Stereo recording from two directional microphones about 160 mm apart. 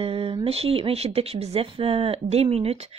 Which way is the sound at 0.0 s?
35° right (ahead or behind).